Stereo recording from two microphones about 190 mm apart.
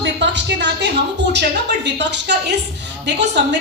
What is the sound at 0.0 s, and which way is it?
A woman's voice, 65° right (ahead or behind).